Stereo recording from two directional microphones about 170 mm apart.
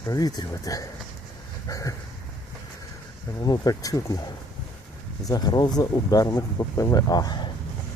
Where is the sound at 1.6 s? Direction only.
20° left (ahead or behind).